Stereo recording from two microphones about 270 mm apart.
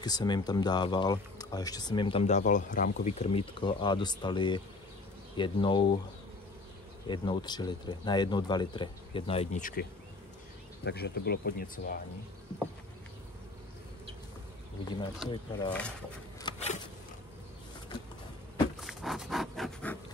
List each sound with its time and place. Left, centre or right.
0.0 s speech: centre
7.1 s speech: centre; by 12.0 s left
15.2 s speech: centre
16.3 s a sound: centre
18.8 s dog: centre